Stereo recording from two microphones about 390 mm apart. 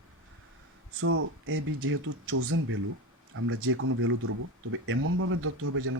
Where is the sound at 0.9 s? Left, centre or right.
Right.